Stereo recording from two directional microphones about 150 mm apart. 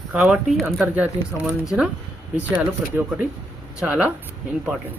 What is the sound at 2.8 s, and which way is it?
Speech, 5° right (ahead or behind).